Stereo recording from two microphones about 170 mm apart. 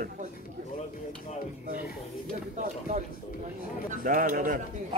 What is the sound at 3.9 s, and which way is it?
Speech, 45° right (ahead or behind).